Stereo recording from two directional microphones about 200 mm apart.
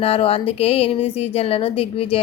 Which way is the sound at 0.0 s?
30° left (ahead or behind).